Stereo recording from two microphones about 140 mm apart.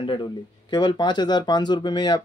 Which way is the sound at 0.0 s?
35° left (ahead or behind).